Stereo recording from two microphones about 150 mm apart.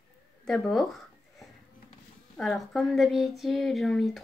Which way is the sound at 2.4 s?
Centre (ahead or behind).